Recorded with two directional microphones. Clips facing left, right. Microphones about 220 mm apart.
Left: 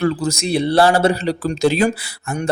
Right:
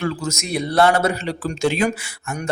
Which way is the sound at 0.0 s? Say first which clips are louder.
Left 6 dB; 35° left (ahead or behind).